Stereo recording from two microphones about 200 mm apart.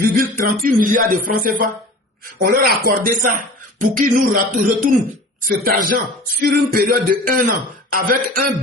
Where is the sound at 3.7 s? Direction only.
40° right (ahead or behind).